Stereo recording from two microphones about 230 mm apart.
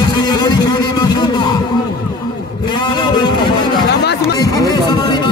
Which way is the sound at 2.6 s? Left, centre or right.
Centre.